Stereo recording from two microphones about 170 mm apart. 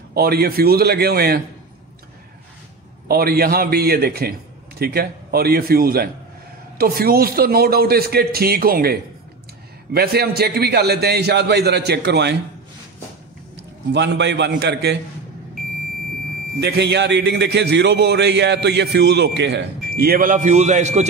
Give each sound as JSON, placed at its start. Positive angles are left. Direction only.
{"t": 0.1, "sound": "a man's voice", "side_deg": -65}
{"t": 3.1, "sound": "a man's voice", "side_deg": -65}
{"t": 9.9, "sound": "a man's voice", "side_deg": -70}
{"t": 13.9, "sound": "a man's voice", "side_deg": -90}
{"t": 16.5, "sound": "a man's voice", "side_deg": -85}